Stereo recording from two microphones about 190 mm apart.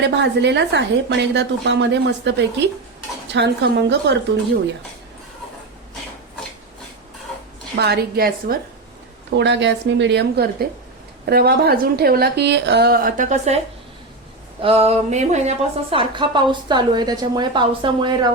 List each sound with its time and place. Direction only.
0.0 s a woman's voice: 65° right (ahead or behind)
7.8 s a woman's voice: 55° right (ahead or behind)
9.3 s a woman's voice: 65° right (ahead or behind); by 13.6 s 35° right (ahead or behind)
14.6 s a woman's voice: 30° right (ahead or behind)